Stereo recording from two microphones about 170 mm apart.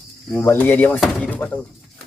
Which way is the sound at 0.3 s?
10° left (ahead or behind).